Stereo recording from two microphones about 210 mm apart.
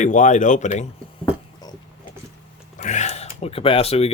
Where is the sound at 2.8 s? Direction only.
35° left (ahead or behind).